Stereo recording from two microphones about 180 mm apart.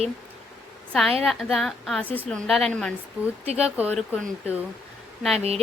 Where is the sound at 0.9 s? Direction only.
Centre (ahead or behind).